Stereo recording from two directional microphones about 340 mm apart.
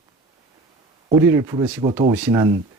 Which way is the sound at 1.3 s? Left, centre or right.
Centre.